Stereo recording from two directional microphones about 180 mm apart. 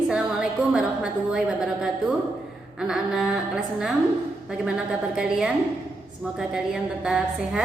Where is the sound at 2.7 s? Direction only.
5° right (ahead or behind).